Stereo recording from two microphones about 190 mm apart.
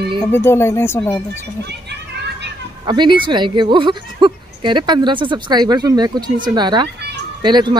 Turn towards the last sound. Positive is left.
turn(degrees=-25)  # may be behind; listen again after turning